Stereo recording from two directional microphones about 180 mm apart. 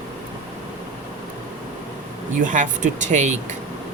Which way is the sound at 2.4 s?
45° right (ahead or behind).